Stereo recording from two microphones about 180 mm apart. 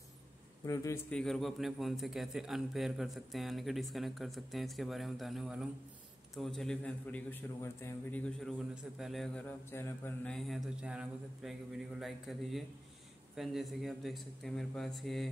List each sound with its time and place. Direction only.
0.7 s a man's voice: 15° left (ahead or behind)
1.1 s a man's voice: centre (ahead or behind)